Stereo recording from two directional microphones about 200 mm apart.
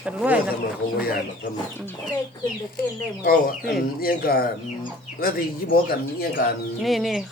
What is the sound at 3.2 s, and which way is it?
Speech, 50° left (ahead or behind).